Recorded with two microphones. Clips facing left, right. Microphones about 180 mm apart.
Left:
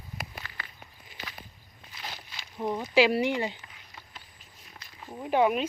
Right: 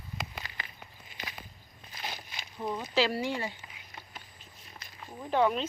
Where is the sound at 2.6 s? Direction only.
15° left (ahead or behind).